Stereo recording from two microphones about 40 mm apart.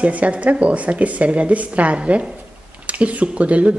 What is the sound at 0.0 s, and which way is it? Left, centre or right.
A woman's voice, right.